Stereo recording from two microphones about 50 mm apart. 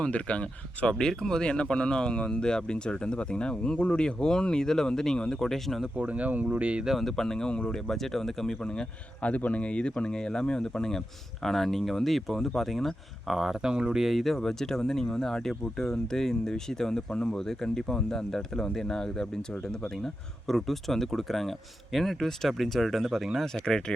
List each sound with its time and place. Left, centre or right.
0.0 s a man's voice: left
0.9 s speech: centre
6.0 s speech: right
7.0 s speech: centre
8.6 s a man's voice: centre
13.6 s speech: centre
14.0 s speech: centre